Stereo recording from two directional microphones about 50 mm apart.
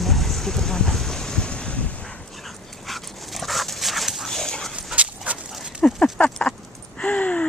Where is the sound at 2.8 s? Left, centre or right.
Centre.